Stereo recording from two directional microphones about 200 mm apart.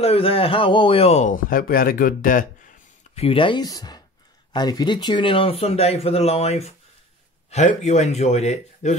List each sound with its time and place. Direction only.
0.0 s speech: 30° left (ahead or behind)
3.2 s speech: 25° left (ahead or behind)